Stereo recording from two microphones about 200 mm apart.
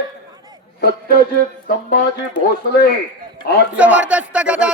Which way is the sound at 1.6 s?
45° left (ahead or behind).